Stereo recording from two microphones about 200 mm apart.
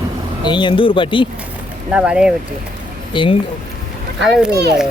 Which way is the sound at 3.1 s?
25° left (ahead or behind).